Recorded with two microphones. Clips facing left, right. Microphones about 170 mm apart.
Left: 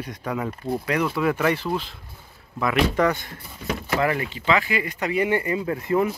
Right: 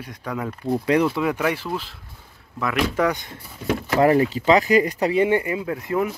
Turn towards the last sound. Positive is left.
turn(degrees=0)  # may be behind; listen again after turning